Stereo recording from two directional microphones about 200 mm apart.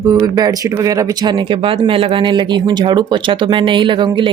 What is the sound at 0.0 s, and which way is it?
Speech, 20° right (ahead or behind).